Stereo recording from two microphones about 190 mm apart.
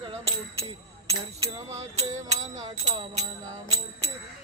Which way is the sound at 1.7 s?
35° right (ahead or behind).